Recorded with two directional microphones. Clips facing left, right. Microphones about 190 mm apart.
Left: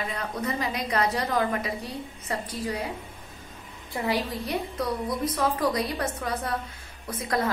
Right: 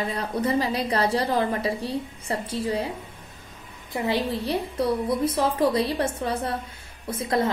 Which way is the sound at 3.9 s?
25° right (ahead or behind).